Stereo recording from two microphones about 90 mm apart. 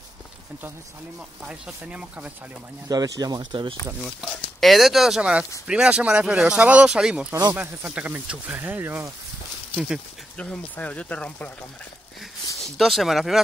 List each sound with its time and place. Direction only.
1.4 s speech: 10° right (ahead or behind)
2.9 s speech: 45° right (ahead or behind)
4.0 s speech: centre (ahead or behind); by 9.0 s 20° right (ahead or behind)
10.3 s speech: 15° left (ahead or behind)
12.7 s speech: centre (ahead or behind)